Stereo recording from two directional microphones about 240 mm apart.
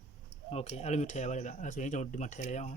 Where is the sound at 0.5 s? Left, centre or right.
Left.